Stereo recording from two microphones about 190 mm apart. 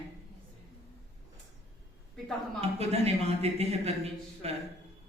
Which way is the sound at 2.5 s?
35° right (ahead or behind).